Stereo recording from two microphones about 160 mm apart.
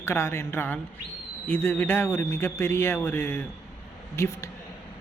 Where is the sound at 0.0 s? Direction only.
15° left (ahead or behind).